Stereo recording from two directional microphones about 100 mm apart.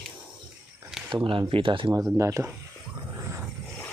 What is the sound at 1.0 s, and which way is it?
Speech, 50° right (ahead or behind).